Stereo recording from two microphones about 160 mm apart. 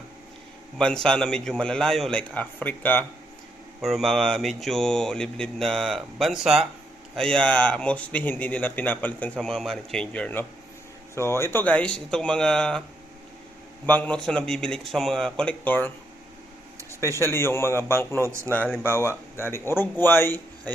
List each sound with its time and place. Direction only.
0.8 s speech: 5° left (ahead or behind)
3.8 s speech: centre (ahead or behind)
13.8 s speech: 10° left (ahead or behind)
17.0 s speech: 15° left (ahead or behind)